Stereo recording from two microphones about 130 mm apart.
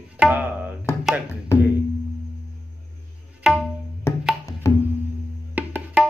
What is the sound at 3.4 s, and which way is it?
Tabla, 5° right (ahead or behind).